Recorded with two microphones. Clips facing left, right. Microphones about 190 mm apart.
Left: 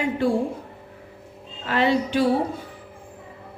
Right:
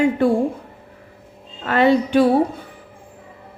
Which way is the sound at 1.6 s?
55° right (ahead or behind).